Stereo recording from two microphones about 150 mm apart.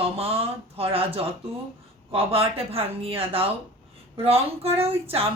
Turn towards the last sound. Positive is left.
turn(degrees=-40)  # may be behind; listen again after turning